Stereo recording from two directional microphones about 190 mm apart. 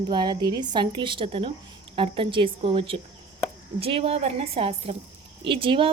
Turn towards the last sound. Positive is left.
turn(degrees=-25)  # may be behind; listen again after turning